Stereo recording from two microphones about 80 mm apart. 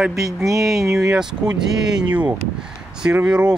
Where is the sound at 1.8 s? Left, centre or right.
Right.